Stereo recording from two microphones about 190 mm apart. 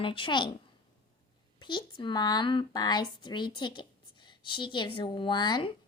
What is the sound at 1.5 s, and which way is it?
Speech, 25° left (ahead or behind).